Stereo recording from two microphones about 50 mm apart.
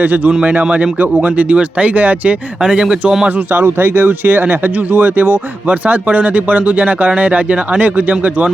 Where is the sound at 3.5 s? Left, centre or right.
Right.